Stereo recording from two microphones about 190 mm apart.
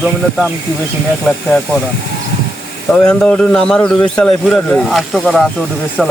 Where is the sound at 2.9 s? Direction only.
5° left (ahead or behind).